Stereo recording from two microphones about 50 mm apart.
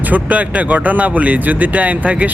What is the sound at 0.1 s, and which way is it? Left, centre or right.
Speech, right.